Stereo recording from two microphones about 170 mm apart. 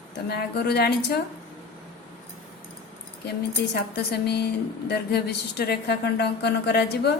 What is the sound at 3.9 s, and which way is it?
A woman's voice, 75° left (ahead or behind).